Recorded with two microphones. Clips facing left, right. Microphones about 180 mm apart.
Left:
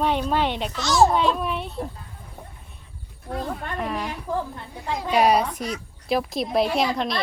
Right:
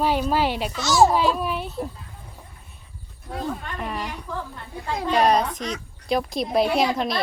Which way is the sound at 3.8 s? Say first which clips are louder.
Left 2 dB; centre (ahead or behind).